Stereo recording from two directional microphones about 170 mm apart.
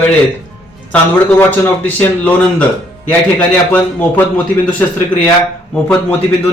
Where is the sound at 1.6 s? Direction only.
10° left (ahead or behind).